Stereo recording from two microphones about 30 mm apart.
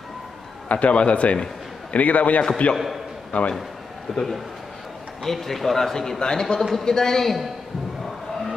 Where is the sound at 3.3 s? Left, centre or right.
Left.